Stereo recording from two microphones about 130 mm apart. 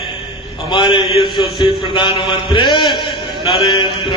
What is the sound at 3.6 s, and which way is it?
Speech, 35° left (ahead or behind).